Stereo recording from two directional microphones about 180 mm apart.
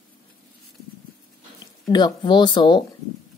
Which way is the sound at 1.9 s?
25° left (ahead or behind).